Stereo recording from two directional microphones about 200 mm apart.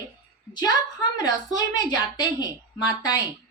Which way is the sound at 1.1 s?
20° left (ahead or behind).